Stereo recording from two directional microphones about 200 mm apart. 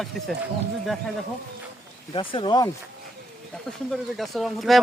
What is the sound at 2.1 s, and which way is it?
Speech, 25° left (ahead or behind).